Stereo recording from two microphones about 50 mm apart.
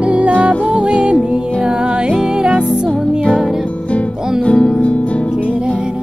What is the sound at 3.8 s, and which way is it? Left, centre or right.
Music, left.